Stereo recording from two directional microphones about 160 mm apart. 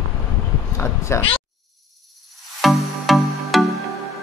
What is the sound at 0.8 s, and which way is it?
Speech, 15° left (ahead or behind).